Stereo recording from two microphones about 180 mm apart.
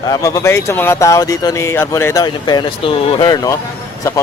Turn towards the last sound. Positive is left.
turn(degrees=20)  # may be behind; listen again after turning